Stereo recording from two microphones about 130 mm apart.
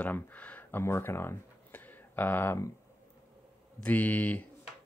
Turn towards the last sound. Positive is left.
turn(degrees=15)  # may be behind; listen again after turning